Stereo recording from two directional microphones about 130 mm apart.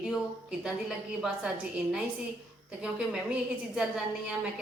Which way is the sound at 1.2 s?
Centre (ahead or behind).